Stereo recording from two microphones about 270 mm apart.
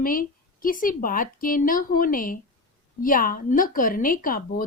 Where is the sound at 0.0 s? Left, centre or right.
Left.